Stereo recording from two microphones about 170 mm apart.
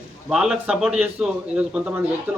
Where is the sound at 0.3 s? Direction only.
5° right (ahead or behind).